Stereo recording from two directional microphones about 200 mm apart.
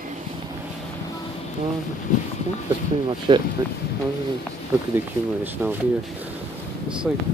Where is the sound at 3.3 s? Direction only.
25° right (ahead or behind).